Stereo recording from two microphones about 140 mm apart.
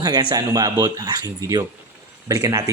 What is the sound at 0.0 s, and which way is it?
Speech, 30° right (ahead or behind).